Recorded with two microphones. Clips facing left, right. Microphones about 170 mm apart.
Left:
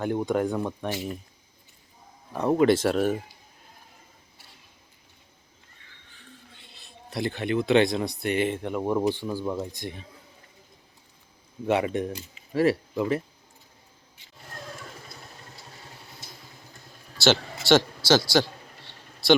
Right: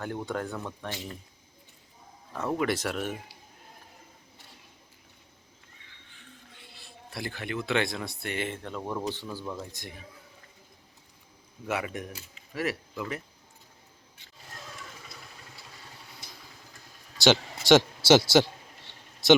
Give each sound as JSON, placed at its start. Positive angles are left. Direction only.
{"t": 0.0, "sound": "speech", "side_deg": 20}
{"t": 2.5, "sound": "speech", "side_deg": 30}
{"t": 6.1, "sound": "a sound", "side_deg": 25}
{"t": 8.2, "sound": "speech", "side_deg": 20}
{"t": 11.6, "sound": "speech", "side_deg": 25}
{"t": 17.2, "sound": "a man's voice", "side_deg": -15}